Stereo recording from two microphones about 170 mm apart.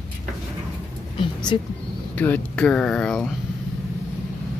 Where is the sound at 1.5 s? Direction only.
30° left (ahead or behind).